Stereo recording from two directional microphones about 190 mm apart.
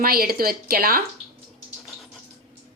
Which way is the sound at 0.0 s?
50° right (ahead or behind).